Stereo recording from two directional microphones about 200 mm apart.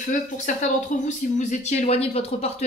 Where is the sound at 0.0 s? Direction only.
40° left (ahead or behind).